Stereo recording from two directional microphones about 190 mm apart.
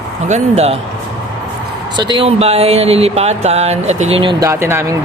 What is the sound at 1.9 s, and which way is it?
Speech, 25° right (ahead or behind).